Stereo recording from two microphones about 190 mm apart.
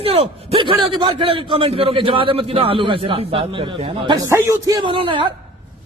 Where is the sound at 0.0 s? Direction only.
30° right (ahead or behind).